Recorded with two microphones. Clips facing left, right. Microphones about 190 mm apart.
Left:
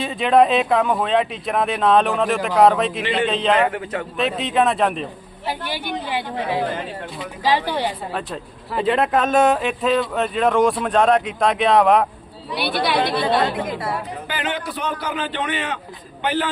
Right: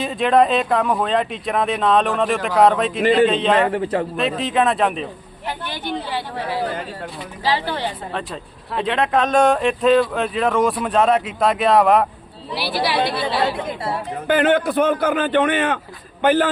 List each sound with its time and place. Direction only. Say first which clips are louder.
0.0 s speech: even; centre (ahead or behind)
3.0 s a man's voice: right 7 dB; 45° right (ahead or behind)
3.2 s speech: right 1 dB; centre (ahead or behind)
3.7 s a man's voice: right 6 dB; 30° right (ahead or behind)
4.2 s speech: left 2 dB; centre (ahead or behind)
5.5 s speech: even; 10° left (ahead or behind)
8.3 s speech: left 1 dB; centre (ahead or behind)
14.3 s a man's voice: right 13 dB; 50° right (ahead or behind)